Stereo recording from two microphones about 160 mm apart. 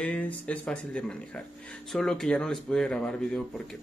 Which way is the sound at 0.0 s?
10° left (ahead or behind).